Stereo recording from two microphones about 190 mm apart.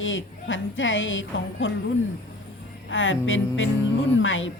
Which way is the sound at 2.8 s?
90° left.